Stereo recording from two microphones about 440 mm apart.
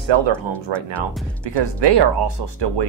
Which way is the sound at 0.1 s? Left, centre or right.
Right.